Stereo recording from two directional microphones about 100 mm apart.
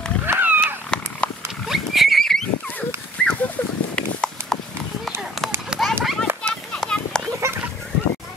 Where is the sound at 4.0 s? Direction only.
10° left (ahead or behind).